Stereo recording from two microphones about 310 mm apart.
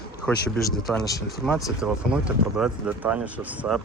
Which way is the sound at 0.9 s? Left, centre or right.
Centre.